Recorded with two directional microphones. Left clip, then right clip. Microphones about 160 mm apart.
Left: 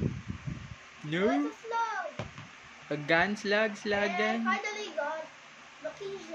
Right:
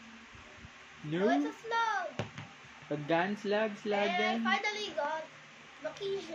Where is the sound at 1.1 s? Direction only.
20° left (ahead or behind).